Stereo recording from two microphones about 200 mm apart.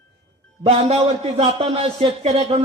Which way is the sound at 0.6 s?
30° right (ahead or behind).